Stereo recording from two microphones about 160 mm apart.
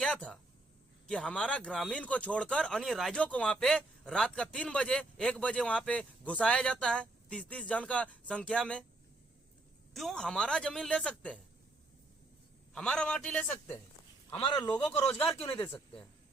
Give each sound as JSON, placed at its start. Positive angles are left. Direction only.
{"t": 0.0, "sound": "speech", "side_deg": 5}
{"t": 9.9, "sound": "speech", "side_deg": 0}
{"t": 12.7, "sound": "speech", "side_deg": 5}
{"t": 14.3, "sound": "speech", "side_deg": 30}